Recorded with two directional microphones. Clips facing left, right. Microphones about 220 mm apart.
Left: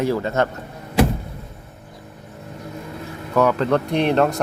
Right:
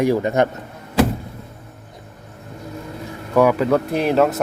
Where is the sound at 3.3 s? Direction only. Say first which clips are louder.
Right 2 dB; 10° right (ahead or behind).